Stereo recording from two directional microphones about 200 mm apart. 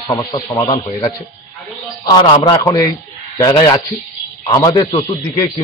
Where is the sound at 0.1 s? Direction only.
20° left (ahead or behind).